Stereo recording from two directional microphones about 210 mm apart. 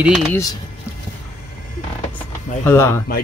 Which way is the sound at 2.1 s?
10° left (ahead or behind).